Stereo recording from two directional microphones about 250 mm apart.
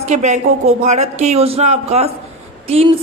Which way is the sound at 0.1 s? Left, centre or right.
Right.